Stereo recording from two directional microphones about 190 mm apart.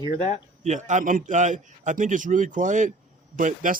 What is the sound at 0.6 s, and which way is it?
A man's voice, 40° right (ahead or behind).